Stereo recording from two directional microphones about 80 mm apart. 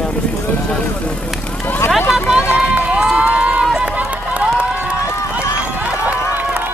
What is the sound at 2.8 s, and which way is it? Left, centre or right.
Run, centre.